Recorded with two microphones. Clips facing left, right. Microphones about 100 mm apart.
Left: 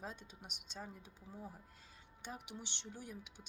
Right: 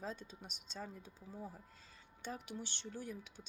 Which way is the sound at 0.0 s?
15° left (ahead or behind).